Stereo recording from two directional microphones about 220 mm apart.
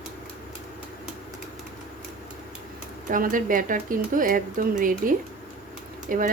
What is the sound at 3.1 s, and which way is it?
Speech, 40° right (ahead or behind).